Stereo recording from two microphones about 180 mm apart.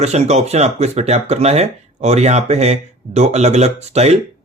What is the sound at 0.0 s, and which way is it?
Speech, 40° right (ahead or behind).